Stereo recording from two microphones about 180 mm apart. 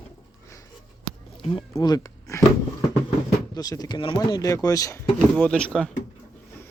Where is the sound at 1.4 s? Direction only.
30° left (ahead or behind).